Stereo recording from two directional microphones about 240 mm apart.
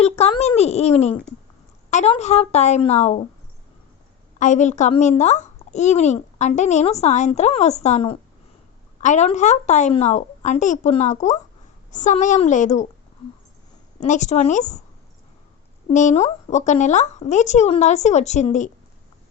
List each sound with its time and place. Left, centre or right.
0.0 s a sound: left
1.9 s a child's voice: left
4.4 s a child's voice: left
14.0 s a child's voice: left
15.9 s a child's voice: left